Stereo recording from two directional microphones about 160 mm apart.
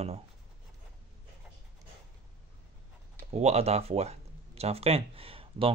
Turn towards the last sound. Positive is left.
turn(degrees=-35)  # may be behind; listen again after turning